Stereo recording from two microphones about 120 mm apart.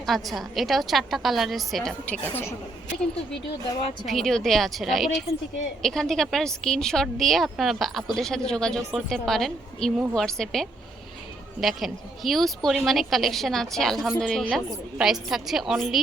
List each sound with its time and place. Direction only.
0.0 s a woman's voice: centre (ahead or behind)
2.0 s a woman's voice: 10° left (ahead or behind)
4.0 s a woman's voice: centre (ahead or behind)